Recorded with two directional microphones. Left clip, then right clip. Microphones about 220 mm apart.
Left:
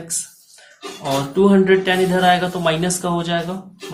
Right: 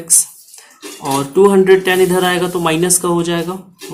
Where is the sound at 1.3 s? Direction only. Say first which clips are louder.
Right 6 dB; 25° right (ahead or behind).